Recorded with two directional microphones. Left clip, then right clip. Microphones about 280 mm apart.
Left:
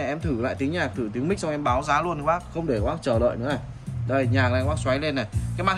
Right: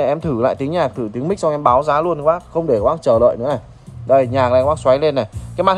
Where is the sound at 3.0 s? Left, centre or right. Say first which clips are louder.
Right 10 dB; right.